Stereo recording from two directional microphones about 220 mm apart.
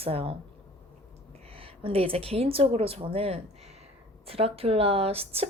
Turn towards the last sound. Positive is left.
turn(degrees=-25)  # may be behind; listen again after turning